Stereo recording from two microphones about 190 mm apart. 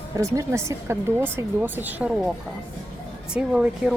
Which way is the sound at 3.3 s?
5° right (ahead or behind).